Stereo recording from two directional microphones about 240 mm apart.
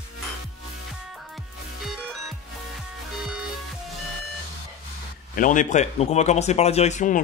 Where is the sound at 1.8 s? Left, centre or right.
Centre.